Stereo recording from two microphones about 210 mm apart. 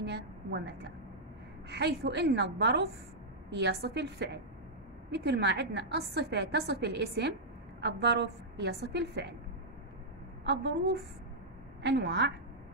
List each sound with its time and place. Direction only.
0.0 s a woman's voice: 55° right (ahead or behind)
10.4 s a woman's voice: 55° right (ahead or behind)
11.8 s a woman's voice: 55° right (ahead or behind)